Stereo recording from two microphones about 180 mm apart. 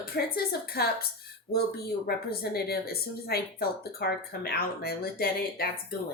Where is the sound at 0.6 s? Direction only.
60° left (ahead or behind).